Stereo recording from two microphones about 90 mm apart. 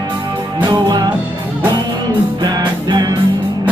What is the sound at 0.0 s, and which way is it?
Music, 55° right (ahead or behind).